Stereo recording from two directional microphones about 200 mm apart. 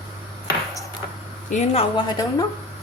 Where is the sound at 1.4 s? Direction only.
35° left (ahead or behind); by 2.5 s 20° left (ahead or behind).